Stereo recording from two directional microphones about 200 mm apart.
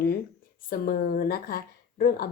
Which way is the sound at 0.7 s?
45° left (ahead or behind).